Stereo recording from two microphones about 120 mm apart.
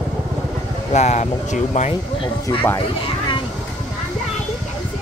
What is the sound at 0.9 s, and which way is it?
Speech, 70° left (ahead or behind).